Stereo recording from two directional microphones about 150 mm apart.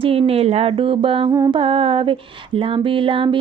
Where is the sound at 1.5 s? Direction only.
35° right (ahead or behind).